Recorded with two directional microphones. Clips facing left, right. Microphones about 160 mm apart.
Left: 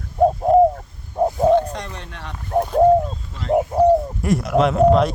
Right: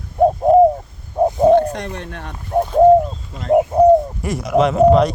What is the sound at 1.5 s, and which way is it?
Speech, 55° right (ahead or behind).